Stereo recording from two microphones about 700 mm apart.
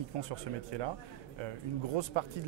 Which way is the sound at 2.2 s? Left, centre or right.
Right.